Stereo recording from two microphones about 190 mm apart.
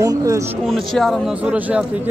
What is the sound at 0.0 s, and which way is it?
Speech, 15° right (ahead or behind).